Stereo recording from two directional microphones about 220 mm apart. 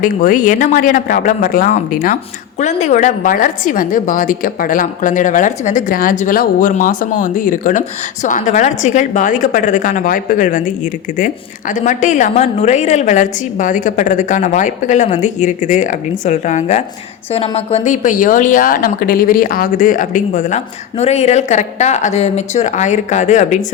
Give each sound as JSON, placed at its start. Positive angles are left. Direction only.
{"t": 0.0, "sound": "a woman's voice", "side_deg": 35}
{"t": 11.7, "sound": "a woman's voice", "side_deg": 35}